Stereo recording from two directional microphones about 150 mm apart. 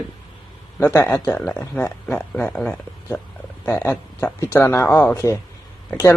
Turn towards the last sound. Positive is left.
turn(degrees=10)  # may be behind; listen again after turning